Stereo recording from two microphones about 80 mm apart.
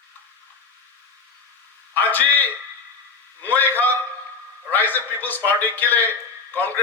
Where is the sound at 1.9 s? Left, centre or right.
Left.